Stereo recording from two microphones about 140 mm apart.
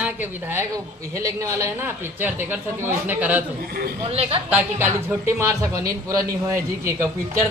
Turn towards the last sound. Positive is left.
turn(degrees=-20)  # may be behind; listen again after turning